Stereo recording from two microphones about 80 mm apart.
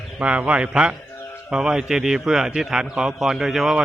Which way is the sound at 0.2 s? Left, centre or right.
Centre.